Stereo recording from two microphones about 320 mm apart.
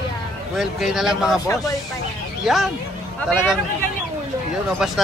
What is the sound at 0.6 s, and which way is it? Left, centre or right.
Speech, centre.